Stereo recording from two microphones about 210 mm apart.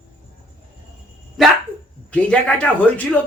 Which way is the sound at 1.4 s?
Centre (ahead or behind).